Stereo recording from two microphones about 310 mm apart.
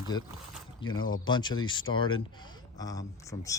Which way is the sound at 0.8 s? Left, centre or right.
Left.